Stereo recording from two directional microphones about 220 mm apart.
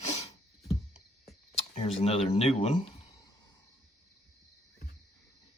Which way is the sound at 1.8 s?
25° left (ahead or behind).